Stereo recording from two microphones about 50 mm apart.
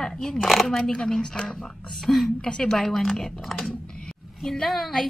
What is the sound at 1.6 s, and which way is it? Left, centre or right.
A woman's voice, centre.